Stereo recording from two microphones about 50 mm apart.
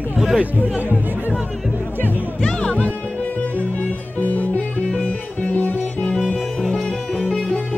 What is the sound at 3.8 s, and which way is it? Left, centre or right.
Music, left.